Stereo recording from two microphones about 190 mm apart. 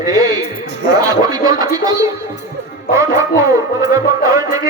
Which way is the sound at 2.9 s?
15° right (ahead or behind).